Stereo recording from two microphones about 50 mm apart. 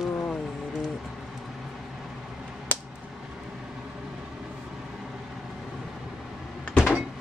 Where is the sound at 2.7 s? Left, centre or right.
Left.